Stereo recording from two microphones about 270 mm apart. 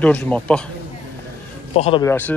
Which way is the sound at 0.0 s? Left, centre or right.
Centre.